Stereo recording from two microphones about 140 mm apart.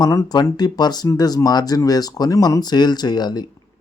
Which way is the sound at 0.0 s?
25° left (ahead or behind).